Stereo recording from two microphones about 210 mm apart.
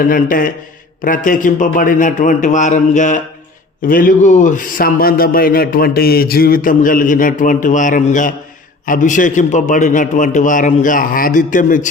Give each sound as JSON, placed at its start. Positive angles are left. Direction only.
{"t": 0.0, "sound": "a man's voice", "side_deg": 40}